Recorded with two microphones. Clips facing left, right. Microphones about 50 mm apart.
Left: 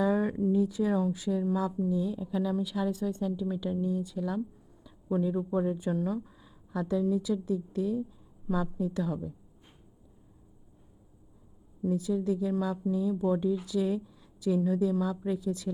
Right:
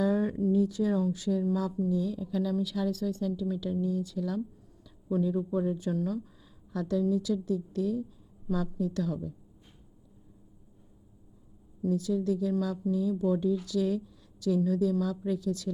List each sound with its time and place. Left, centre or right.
0.0 s speech: left
11.8 s speech: centre